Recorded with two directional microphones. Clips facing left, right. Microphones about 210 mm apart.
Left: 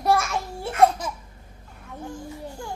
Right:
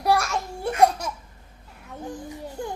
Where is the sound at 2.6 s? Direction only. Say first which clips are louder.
Right 5 dB; 20° right (ahead or behind).